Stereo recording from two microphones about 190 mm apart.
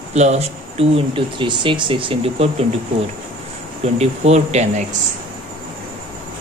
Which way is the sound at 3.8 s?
35° right (ahead or behind).